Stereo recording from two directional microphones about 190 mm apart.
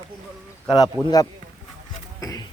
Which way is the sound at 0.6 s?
20° left (ahead or behind).